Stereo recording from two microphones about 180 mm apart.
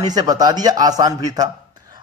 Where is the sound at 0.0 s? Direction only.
20° right (ahead or behind).